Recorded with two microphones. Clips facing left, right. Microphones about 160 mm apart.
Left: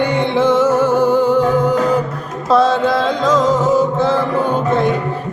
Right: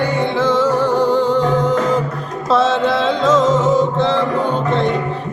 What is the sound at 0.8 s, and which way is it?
Music, 15° right (ahead or behind).